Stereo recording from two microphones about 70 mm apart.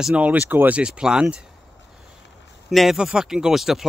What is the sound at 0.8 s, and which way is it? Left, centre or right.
Speech, centre.